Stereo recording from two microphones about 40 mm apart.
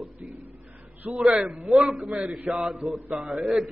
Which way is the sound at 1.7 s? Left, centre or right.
Centre.